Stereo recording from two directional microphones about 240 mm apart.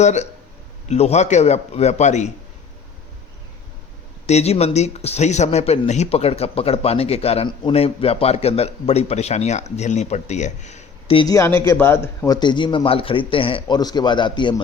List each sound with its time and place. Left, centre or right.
0.0 s speech: left
4.3 s speech: left